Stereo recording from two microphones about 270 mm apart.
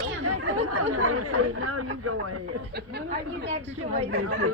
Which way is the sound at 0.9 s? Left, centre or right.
Right.